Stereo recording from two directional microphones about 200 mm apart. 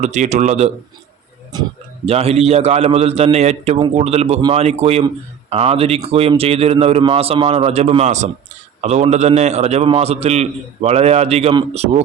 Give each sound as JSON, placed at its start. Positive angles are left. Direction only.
{"t": 0.0, "sound": "speech", "side_deg": -35}
{"t": 1.5, "sound": "speech", "side_deg": -20}
{"t": 2.0, "sound": "speech", "side_deg": -30}